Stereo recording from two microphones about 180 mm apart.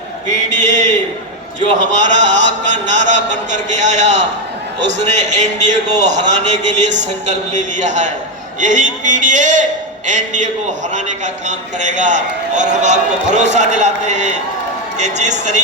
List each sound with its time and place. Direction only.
0.3 s a man's voice: 40° right (ahead or behind)